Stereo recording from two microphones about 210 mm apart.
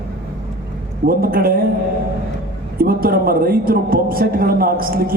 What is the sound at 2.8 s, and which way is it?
Speech, 45° right (ahead or behind).